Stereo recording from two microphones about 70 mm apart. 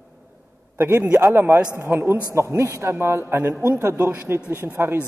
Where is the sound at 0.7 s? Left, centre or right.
Right.